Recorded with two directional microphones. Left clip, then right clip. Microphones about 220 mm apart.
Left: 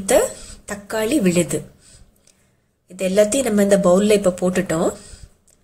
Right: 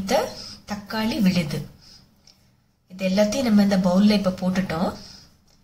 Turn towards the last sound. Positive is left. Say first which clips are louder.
# left 6 dB
turn(degrees=20)  # may be behind; listen again after turning